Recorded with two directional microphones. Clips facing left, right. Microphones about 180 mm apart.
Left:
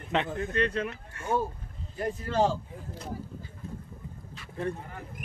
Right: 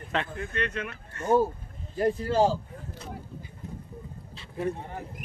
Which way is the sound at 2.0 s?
35° right (ahead or behind).